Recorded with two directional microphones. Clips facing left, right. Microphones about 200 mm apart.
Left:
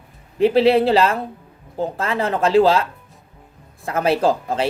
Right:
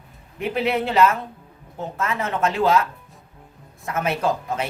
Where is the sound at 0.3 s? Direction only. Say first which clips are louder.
Left 9 dB; 30° left (ahead or behind).